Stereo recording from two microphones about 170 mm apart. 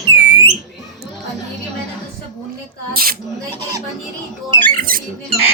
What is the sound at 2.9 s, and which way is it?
Speech, 60° right (ahead or behind).